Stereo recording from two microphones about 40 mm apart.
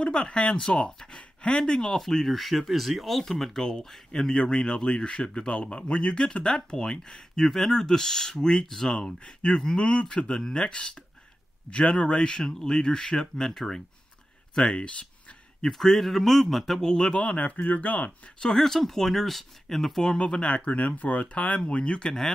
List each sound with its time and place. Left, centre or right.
0.0 s a man's voice: left
2.0 s a man's voice: centre
7.4 s a man's voice: centre
14.7 s speech: left
15.6 s speech: centre
16.8 s speech: centre
17.1 s speech: left
18.4 s speech: centre
20.3 s a man's voice: left